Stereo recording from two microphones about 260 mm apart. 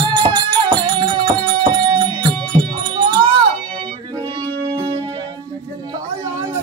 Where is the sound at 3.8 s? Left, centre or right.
Centre.